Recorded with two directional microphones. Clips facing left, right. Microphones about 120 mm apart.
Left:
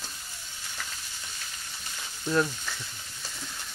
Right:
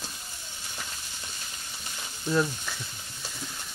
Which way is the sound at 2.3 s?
5° right (ahead or behind).